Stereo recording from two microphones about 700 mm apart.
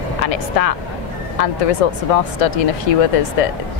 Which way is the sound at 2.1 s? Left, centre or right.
Left.